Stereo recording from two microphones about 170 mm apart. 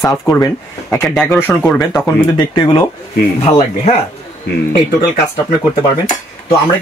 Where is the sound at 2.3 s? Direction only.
30° left (ahead or behind).